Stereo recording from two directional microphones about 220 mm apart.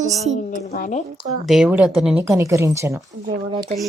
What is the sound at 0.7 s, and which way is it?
Speech, 40° left (ahead or behind).